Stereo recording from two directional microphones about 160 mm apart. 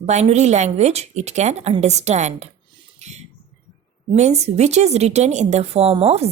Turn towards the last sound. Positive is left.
turn(degrees=-40)  # may be behind; listen again after turning